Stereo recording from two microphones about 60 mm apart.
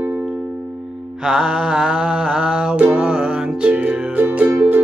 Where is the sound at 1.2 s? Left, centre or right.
Centre.